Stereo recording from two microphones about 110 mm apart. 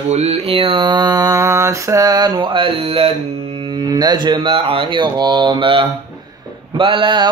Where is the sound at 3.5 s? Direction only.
45° right (ahead or behind).